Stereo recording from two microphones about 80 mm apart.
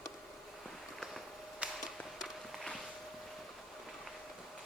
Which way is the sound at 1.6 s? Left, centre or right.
Centre.